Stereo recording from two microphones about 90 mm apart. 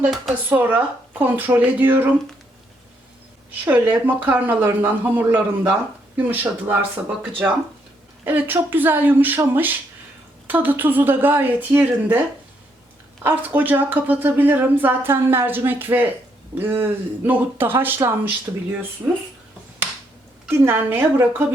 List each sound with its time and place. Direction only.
0.5 s speech: 20° right (ahead or behind)
3.6 s speech: 20° right (ahead or behind)
13.2 s speech: 20° right (ahead or behind)
20.5 s speech: 25° right (ahead or behind)